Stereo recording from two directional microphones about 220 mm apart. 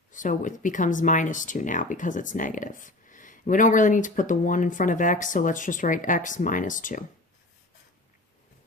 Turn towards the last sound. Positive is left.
turn(degrees=35)  # may be behind; listen again after turning